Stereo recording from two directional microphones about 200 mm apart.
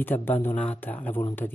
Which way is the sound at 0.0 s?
10° left (ahead or behind).